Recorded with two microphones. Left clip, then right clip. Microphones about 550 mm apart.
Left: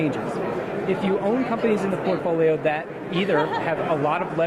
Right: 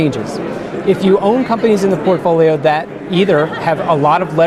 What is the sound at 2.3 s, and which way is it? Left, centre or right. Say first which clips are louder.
Speech: right 9 dB; right.